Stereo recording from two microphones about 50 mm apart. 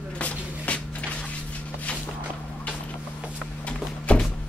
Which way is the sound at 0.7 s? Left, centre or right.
Left.